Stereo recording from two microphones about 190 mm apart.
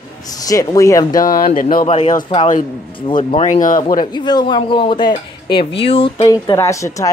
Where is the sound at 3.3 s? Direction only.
40° left (ahead or behind).